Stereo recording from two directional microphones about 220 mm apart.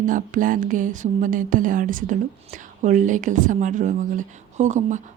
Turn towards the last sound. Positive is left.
turn(degrees=-35)  # may be behind; listen again after turning